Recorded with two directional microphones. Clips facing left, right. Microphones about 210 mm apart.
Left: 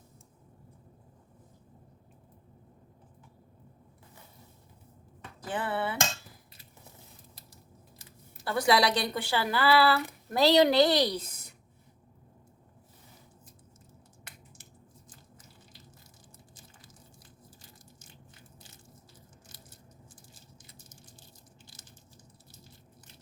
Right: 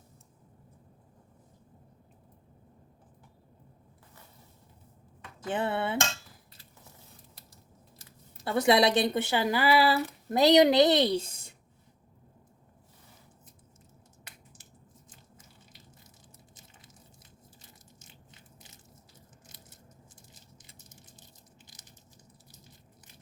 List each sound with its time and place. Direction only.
5.5 s a woman's voice: 25° right (ahead or behind)
8.4 s a woman's voice: 20° right (ahead or behind)
20.3 s a sound: 20° right (ahead or behind)